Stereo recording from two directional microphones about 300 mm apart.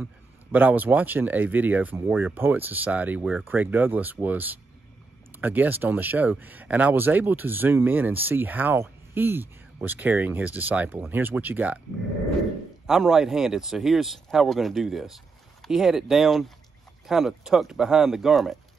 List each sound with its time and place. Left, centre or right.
0.0 s speech: centre
12.8 s speech: centre